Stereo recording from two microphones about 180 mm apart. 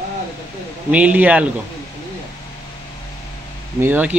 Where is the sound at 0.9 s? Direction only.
10° right (ahead or behind).